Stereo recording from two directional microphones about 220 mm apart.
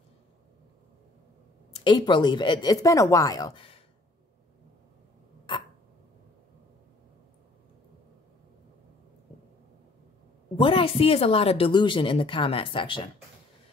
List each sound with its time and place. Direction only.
1.7 s speech: 20° left (ahead or behind)
10.5 s speech: 25° left (ahead or behind)